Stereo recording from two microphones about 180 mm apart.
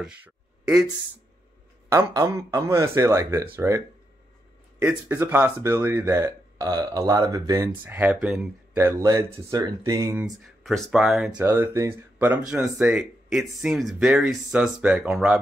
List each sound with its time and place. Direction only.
1.9 s a man's voice: 15° right (ahead or behind)
5.0 s a man's voice: 10° right (ahead or behind)
10.2 s speech: centre (ahead or behind)